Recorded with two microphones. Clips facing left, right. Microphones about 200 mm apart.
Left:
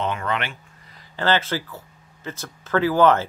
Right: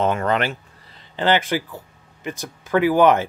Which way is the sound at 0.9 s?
20° right (ahead or behind).